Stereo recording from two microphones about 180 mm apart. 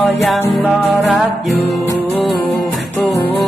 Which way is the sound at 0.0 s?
Centre (ahead or behind).